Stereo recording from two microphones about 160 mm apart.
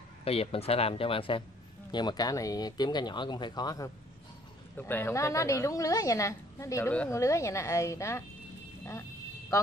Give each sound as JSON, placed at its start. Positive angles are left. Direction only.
{"t": 0.2, "sound": "a woman's voice", "side_deg": 35}
{"t": 4.7, "sound": "a woman's voice", "side_deg": 10}